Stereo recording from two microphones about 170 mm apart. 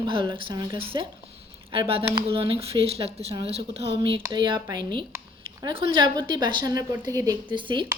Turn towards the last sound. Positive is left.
turn(degrees=-30)  # may be behind; listen again after turning